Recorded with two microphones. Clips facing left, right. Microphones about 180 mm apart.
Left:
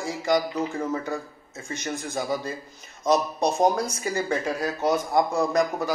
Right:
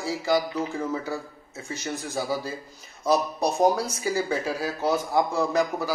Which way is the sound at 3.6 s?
5° right (ahead or behind).